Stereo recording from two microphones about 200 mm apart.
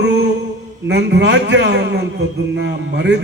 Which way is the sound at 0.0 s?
60° right (ahead or behind).